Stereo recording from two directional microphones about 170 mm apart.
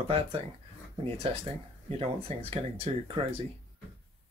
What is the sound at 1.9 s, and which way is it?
Speech, 35° right (ahead or behind).